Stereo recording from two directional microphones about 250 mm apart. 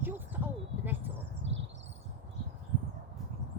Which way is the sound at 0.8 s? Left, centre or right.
Centre.